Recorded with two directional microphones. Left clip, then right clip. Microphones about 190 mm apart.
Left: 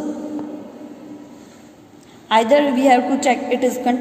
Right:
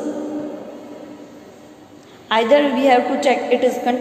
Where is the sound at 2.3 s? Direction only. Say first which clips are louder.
Even; 30° left (ahead or behind).